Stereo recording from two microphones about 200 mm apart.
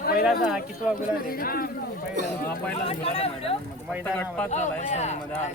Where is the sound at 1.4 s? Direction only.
50° left (ahead or behind).